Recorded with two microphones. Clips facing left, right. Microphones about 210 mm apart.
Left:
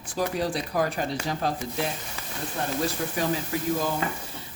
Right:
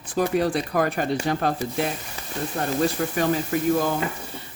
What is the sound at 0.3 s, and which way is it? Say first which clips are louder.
Speech: right 5 dB; 60° right (ahead or behind).